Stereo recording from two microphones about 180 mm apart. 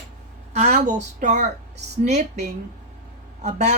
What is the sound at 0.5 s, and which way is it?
A woman's voice, 40° right (ahead or behind).